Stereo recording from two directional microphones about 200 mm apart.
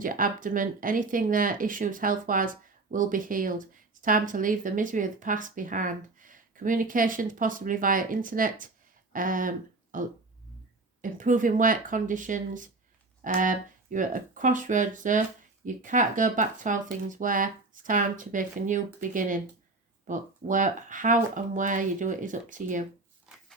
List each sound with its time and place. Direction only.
0.0 s speech: 45° right (ahead or behind)
11.0 s speech: 40° right (ahead or behind)